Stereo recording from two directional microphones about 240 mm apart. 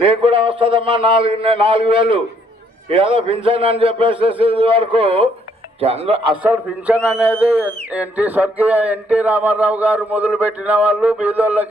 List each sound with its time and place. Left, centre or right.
0.0 s a man's voice: right
6.4 s speech: centre